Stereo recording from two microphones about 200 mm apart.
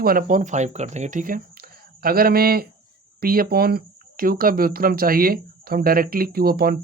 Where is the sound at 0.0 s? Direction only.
45° right (ahead or behind).